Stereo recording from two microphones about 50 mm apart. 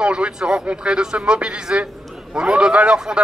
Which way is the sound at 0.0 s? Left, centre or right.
Centre.